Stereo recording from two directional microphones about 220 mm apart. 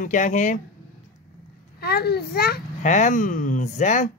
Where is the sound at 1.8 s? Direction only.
45° left (ahead or behind).